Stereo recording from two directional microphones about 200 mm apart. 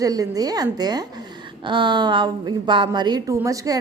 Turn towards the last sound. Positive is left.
turn(degrees=-15)  # may be behind; listen again after turning